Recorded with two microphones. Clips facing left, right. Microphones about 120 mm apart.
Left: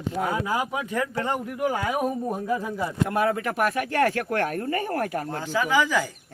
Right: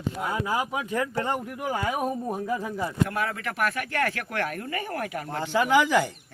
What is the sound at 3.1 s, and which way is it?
Speech, 40° left (ahead or behind).